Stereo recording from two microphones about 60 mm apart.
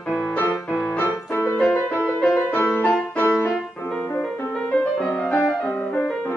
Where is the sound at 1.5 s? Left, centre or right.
Left.